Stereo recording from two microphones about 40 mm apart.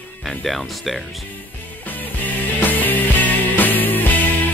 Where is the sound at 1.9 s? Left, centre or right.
Left.